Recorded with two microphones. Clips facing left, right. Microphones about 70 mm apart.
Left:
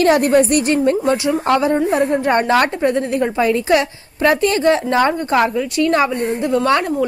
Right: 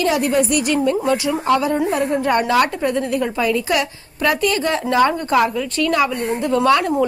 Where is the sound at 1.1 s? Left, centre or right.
Left.